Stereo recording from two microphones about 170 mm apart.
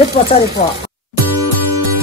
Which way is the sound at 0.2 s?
50° left (ahead or behind).